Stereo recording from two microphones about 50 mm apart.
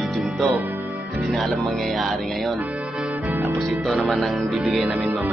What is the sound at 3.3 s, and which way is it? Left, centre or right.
Music, right.